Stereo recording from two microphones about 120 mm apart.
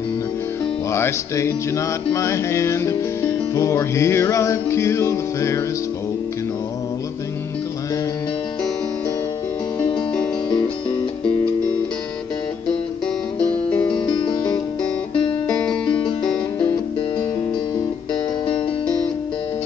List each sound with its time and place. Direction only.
0.8 s music: 25° left (ahead or behind)
9.8 s music: 10° left (ahead or behind)
13.8 s music: 40° left (ahead or behind)
15.6 s music: 5° left (ahead or behind)